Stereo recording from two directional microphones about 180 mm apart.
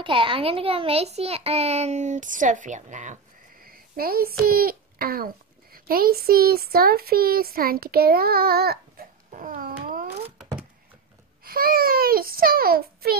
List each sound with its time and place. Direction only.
0.0 s a child's voice: 30° right (ahead or behind)
3.6 s a child's voice: 55° right (ahead or behind)
9.8 s a sound: 50° right (ahead or behind)
11.4 s a child's voice: 55° right (ahead or behind)